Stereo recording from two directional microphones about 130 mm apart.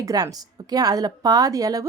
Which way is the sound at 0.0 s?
30° right (ahead or behind).